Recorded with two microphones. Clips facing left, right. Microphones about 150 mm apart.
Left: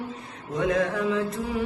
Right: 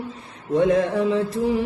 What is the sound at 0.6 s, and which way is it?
Music, 30° right (ahead or behind).